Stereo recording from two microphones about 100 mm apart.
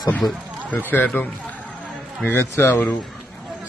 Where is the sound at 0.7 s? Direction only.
15° left (ahead or behind).